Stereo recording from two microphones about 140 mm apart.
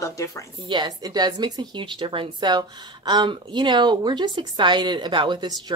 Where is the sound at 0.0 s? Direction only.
20° left (ahead or behind).